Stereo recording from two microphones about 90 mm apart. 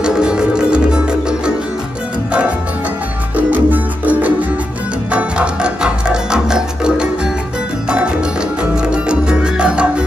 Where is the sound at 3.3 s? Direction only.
20° right (ahead or behind).